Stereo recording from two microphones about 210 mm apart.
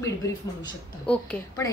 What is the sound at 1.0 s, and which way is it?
Speech, 15° left (ahead or behind).